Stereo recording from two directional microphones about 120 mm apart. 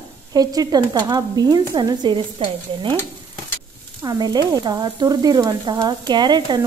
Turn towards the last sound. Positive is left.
turn(degrees=-35)  # may be behind; listen again after turning